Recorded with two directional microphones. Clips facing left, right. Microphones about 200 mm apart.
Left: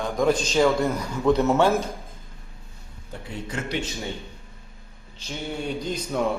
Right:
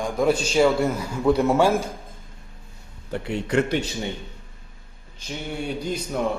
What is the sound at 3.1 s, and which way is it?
Speech, 70° right (ahead or behind).